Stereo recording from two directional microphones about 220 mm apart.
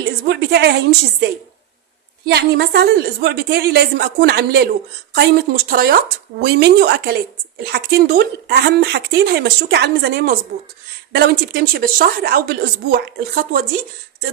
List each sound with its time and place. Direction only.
0.3 s speech: 50° right (ahead or behind)
2.2 s speech: 50° right (ahead or behind)